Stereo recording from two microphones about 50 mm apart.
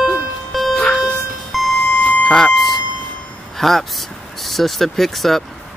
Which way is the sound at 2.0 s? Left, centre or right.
Left.